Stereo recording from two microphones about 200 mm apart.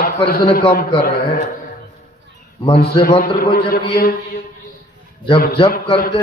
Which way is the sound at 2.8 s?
45° left (ahead or behind).